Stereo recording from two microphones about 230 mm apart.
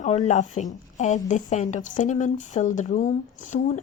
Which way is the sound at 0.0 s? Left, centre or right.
Left.